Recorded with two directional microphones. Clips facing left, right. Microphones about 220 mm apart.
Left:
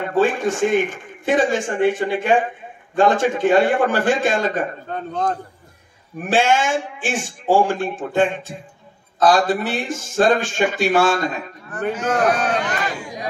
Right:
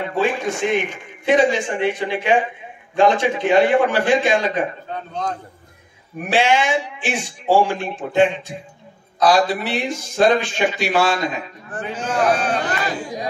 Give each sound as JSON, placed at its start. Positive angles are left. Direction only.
{"t": 0.0, "sound": "a man's voice", "side_deg": 50}
{"t": 6.3, "sound": "a man's voice", "side_deg": 50}
{"t": 11.9, "sound": "speech", "side_deg": -30}